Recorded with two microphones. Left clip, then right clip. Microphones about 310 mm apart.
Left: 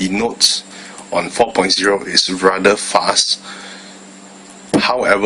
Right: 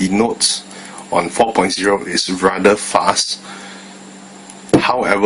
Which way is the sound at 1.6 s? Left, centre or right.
Centre.